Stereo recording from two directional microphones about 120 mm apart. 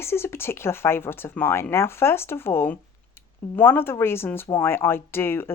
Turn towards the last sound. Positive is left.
turn(degrees=20)  # may be behind; listen again after turning